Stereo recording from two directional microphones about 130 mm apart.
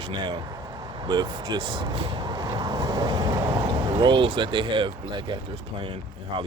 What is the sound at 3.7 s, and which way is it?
Speech, 35° right (ahead or behind).